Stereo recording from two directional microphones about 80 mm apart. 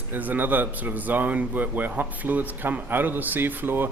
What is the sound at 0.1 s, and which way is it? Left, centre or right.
Speech, right.